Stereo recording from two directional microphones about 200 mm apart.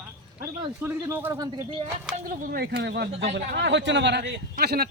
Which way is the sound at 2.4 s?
50° right (ahead or behind).